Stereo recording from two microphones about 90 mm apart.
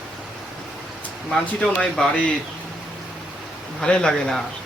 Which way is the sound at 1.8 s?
10° left (ahead or behind).